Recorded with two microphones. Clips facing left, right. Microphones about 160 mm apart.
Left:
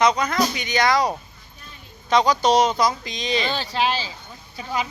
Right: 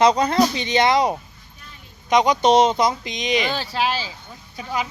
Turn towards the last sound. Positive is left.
turn(degrees=-10)  # may be behind; listen again after turning